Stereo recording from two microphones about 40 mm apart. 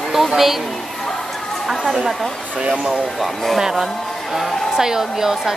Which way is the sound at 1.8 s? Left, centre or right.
Centre.